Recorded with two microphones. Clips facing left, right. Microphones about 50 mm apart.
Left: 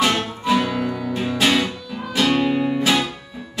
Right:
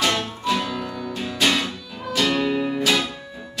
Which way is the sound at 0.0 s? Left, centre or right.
Centre.